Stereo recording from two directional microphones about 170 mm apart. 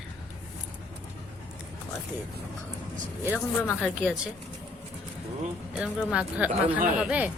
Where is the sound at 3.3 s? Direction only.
15° left (ahead or behind).